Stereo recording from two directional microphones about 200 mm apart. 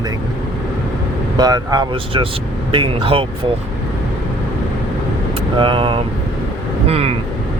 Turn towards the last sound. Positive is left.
turn(degrees=-30)  # may be behind; listen again after turning